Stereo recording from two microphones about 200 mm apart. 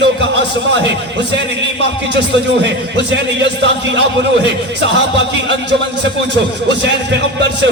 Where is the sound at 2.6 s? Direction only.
60° right (ahead or behind).